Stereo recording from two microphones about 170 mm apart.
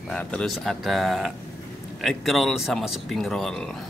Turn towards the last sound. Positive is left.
turn(degrees=5)  # may be behind; listen again after turning